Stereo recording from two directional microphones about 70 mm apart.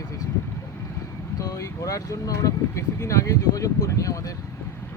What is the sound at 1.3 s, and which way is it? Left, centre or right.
Speech, left.